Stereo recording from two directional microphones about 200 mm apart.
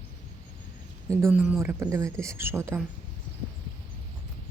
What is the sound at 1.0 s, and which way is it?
Speech, 10° right (ahead or behind).